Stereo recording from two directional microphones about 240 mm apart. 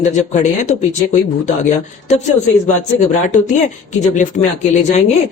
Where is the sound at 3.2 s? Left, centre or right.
Left.